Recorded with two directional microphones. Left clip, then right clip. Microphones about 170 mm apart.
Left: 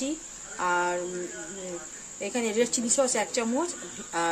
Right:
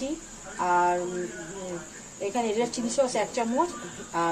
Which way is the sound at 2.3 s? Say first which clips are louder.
Left 1 dB; 30° left (ahead or behind).